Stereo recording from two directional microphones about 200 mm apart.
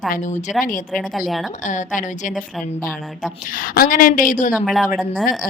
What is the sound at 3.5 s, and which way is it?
A woman's voice, 45° left (ahead or behind).